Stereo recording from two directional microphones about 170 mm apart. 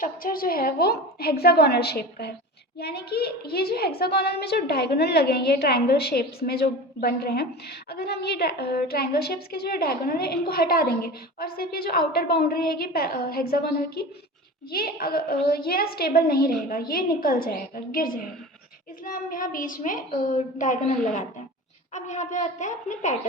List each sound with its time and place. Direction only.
0.0 s a woman's voice: 55° left (ahead or behind)